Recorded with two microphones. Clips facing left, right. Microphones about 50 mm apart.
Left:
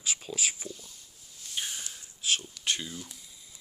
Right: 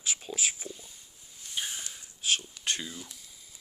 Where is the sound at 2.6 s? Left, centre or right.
Centre.